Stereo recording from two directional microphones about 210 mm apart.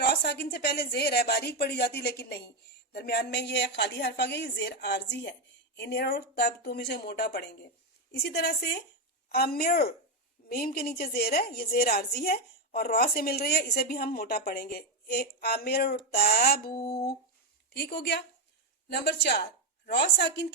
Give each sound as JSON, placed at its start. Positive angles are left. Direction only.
{"t": 0.0, "sound": "a woman's voice", "side_deg": 50}